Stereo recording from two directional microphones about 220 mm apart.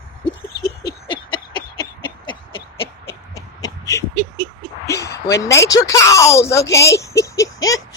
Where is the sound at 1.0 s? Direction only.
20° left (ahead or behind).